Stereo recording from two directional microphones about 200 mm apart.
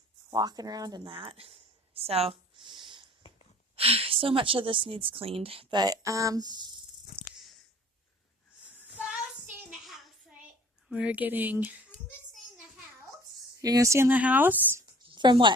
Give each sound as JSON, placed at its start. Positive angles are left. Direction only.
{"t": 0.3, "sound": "speech", "side_deg": -20}
{"t": 3.8, "sound": "a woman's voice", "side_deg": -30}
{"t": 7.1, "sound": "a sound", "side_deg": 55}
{"t": 8.8, "sound": "child singing", "side_deg": -5}
{"t": 10.8, "sound": "speech", "side_deg": -5}
{"t": 13.6, "sound": "speech", "side_deg": -15}
{"t": 15.0, "sound": "a sound", "side_deg": -20}